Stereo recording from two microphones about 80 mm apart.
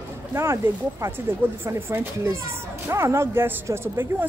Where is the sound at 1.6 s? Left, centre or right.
Right.